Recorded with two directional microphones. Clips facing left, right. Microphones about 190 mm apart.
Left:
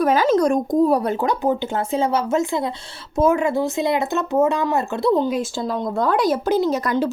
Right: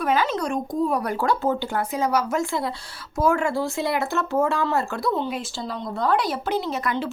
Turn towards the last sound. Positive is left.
turn(degrees=40)  # may be behind; listen again after turning